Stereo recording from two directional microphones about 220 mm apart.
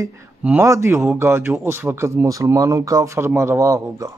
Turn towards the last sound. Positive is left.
turn(degrees=-15)  # may be behind; listen again after turning